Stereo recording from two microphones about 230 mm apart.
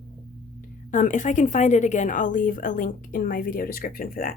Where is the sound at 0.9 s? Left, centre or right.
Left.